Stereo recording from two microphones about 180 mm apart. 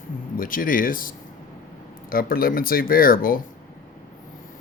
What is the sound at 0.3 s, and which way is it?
Speech, 50° left (ahead or behind).